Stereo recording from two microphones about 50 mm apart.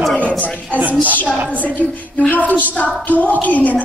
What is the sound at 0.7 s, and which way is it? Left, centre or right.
Music, right.